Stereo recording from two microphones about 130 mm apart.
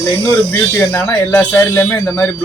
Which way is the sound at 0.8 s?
20° left (ahead or behind).